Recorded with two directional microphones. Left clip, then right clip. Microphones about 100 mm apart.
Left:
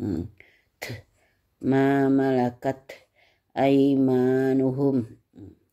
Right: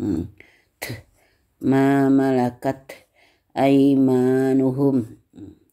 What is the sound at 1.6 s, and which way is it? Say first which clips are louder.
Speech: right 3 dB; 15° left (ahead or behind).